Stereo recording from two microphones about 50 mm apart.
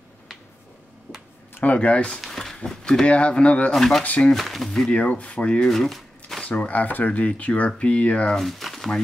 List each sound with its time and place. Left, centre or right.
1.6 s speech: left
2.2 s a sound: centre
2.8 s speech: centre
3.7 s speech: centre
4.9 s speech: left
5.7 s speech: centre
6.4 s speech: left
8.4 s speech: centre